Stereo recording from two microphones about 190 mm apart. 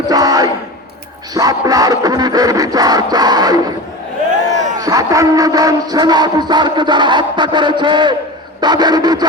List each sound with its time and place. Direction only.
0.1 s crowd: 20° right (ahead or behind)
1.3 s music: 20° right (ahead or behind)
4.8 s music: 20° right (ahead or behind)